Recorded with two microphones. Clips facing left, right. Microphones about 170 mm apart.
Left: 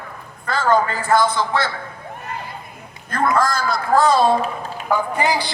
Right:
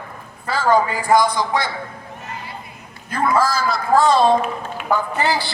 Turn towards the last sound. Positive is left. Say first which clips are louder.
# left 1 dB
turn(degrees=15)  # may be behind; listen again after turning